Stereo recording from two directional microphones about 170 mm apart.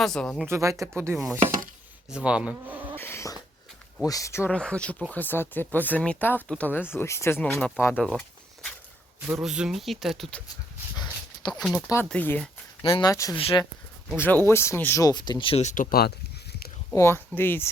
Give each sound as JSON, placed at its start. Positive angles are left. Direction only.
{"t": 0.0, "sound": "speech", "side_deg": 5}
{"t": 0.4, "sound": "speech", "side_deg": -15}
{"t": 2.0, "sound": "speech", "side_deg": -5}
{"t": 2.9, "sound": "a sound", "side_deg": 15}
{"t": 4.0, "sound": "speech", "side_deg": 20}
{"t": 9.2, "sound": "speech", "side_deg": -5}
{"t": 10.9, "sound": "dog", "side_deg": 25}
{"t": 12.0, "sound": "speech", "side_deg": 10}
{"t": 12.8, "sound": "speech", "side_deg": 25}
{"t": 13.3, "sound": "speech", "side_deg": 30}
{"t": 14.2, "sound": "speech", "side_deg": 10}
{"t": 16.9, "sound": "speech", "side_deg": 15}